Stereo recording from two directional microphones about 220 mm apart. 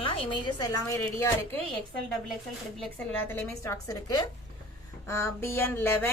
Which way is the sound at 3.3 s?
15° left (ahead or behind).